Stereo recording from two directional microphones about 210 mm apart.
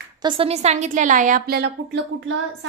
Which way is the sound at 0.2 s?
25° right (ahead or behind).